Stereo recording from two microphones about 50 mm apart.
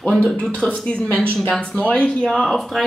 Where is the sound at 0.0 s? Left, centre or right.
Left.